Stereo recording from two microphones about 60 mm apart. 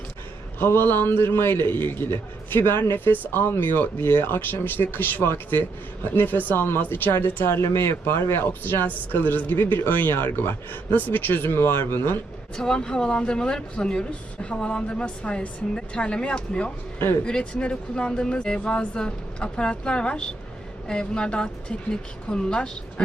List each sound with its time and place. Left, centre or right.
0.6 s speech: left
12.5 s speech: centre